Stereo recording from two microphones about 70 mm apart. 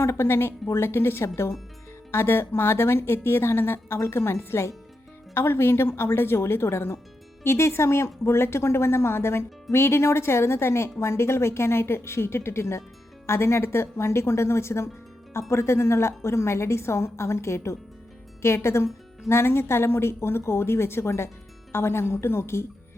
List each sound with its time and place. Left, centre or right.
0.0 s a woman's voice: left